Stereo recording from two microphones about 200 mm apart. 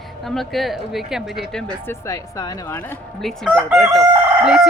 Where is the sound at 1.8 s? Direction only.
15° left (ahead or behind).